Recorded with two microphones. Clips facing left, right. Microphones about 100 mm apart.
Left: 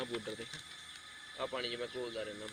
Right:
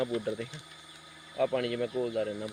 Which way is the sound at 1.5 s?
50° right (ahead or behind).